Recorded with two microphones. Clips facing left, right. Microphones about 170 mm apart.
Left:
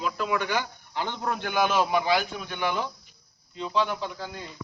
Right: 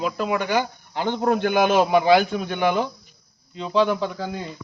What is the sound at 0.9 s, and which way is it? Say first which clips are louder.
A man's voice: right 9 dB; 55° right (ahead or behind).